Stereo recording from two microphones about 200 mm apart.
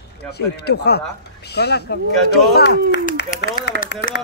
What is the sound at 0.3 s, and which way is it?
Speech, 55° left (ahead or behind).